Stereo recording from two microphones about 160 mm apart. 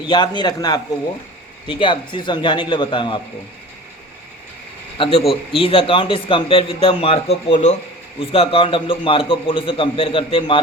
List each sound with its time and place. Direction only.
0.0 s a man's voice: 30° left (ahead or behind)
5.0 s a man's voice: 35° left (ahead or behind)